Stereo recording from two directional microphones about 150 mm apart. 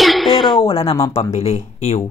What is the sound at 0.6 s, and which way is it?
Speech, 40° left (ahead or behind).